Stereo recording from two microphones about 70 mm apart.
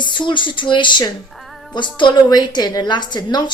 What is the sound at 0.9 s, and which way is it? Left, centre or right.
A woman's voice, left.